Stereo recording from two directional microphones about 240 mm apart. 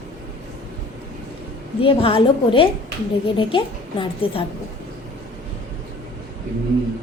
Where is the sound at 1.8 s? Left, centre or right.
Left.